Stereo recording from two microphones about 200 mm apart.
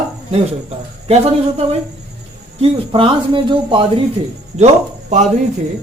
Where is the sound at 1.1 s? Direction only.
30° right (ahead or behind).